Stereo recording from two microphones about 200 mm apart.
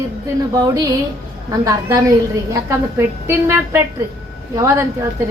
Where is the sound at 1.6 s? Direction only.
15° right (ahead or behind).